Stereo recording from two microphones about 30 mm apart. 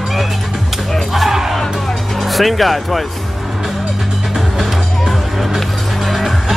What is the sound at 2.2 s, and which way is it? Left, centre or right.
Speech, centre.